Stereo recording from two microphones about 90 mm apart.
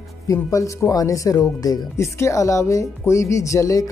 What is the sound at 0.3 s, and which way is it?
Speech, 35° left (ahead or behind).